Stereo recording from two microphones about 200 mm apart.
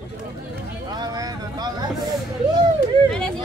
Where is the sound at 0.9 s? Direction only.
20° right (ahead or behind).